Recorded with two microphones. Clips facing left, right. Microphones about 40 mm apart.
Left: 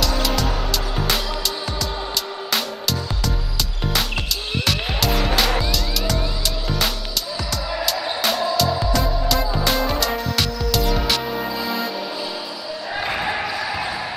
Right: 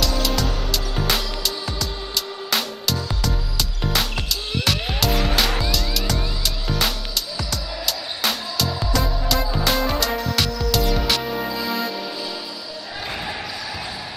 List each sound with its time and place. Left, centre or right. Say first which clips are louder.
0.0 s music: left 1 dB; centre
2.5 s music: even; centre
4.6 s music: even; centre
7.8 s music: left 3 dB; centre
13.1 s basketball bounce: left 5 dB; left